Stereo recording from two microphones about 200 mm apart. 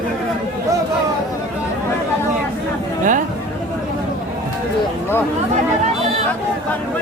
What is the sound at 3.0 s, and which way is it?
Chatter, 40° right (ahead or behind).